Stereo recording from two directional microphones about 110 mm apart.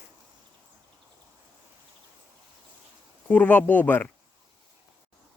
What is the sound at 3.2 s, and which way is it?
Speech, 15° left (ahead or behind).